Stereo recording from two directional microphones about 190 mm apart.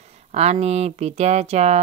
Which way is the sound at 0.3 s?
35° right (ahead or behind).